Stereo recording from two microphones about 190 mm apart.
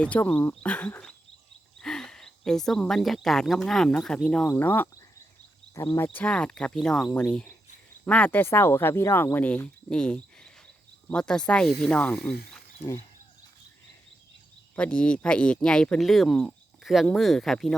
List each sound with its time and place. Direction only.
0.0 s speech: 5° left (ahead or behind)
6.1 s speech: 5° left (ahead or behind)
14.8 s speech: 5° left (ahead or behind)